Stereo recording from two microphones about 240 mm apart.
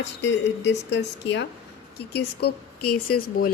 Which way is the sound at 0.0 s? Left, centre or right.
Left.